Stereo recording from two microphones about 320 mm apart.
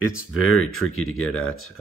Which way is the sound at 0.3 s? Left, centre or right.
Left.